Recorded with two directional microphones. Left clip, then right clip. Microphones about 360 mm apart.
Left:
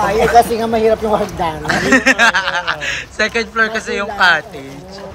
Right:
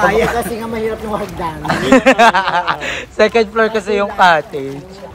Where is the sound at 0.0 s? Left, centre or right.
Centre.